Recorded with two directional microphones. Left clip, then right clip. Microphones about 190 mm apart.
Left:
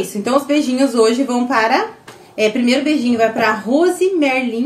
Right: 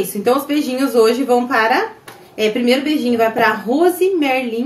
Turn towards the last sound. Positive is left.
turn(degrees=20)  # may be behind; listen again after turning